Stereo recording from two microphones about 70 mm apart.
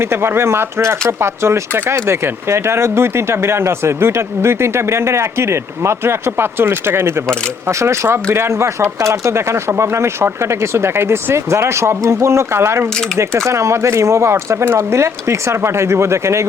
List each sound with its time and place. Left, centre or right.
0.0 s speech: right